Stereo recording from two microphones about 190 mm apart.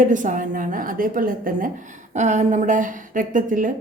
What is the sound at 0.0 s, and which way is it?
A woman's voice, 40° right (ahead or behind).